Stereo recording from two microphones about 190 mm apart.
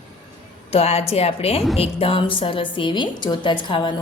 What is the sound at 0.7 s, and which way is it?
A woman's voice, 30° left (ahead or behind).